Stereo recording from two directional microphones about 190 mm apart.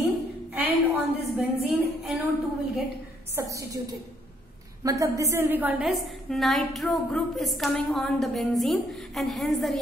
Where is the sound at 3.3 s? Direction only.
15° right (ahead or behind).